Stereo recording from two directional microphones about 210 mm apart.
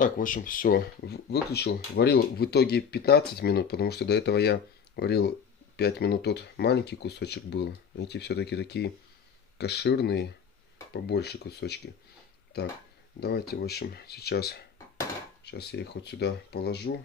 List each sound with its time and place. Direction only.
0.0 s speech: 40° left (ahead or behind)